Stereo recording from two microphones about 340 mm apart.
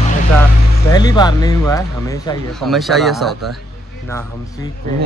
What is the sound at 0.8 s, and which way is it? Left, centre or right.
Speech, centre.